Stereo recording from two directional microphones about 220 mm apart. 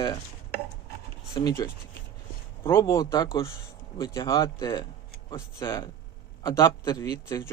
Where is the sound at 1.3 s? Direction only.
15° left (ahead or behind).